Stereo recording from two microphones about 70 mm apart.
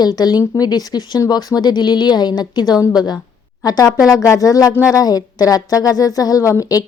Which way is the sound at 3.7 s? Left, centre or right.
Left.